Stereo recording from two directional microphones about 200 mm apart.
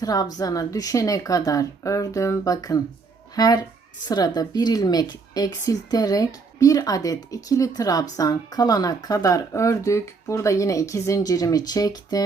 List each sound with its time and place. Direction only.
0.0 s speech: 20° left (ahead or behind)